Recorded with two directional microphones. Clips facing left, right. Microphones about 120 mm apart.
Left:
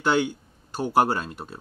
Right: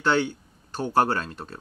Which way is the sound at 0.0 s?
10° left (ahead or behind).